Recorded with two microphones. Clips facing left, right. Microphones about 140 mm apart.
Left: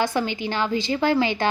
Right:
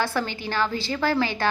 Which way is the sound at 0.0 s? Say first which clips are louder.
Left 3 dB; 15° left (ahead or behind).